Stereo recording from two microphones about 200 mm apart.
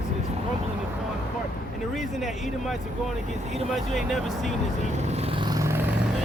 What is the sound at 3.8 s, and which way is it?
Speech, centre (ahead or behind).